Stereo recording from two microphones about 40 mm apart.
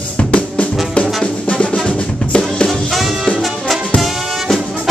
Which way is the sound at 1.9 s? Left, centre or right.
Left.